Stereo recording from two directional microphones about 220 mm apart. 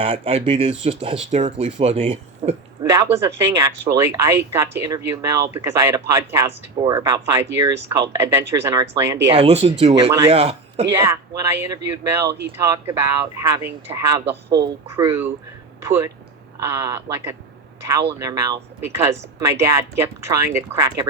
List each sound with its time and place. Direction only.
0.0 s speech: 25° right (ahead or behind)
2.9 s speech: 15° right (ahead or behind)
9.3 s speech: 25° right (ahead or behind)
10.8 s speech: 15° right (ahead or behind)